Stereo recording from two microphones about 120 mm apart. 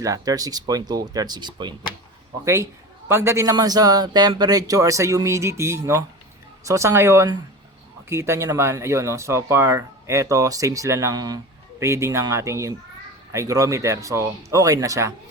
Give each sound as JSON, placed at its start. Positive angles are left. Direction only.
{"t": 0.0, "sound": "speech", "side_deg": -30}
{"t": 2.4, "sound": "speech", "side_deg": -25}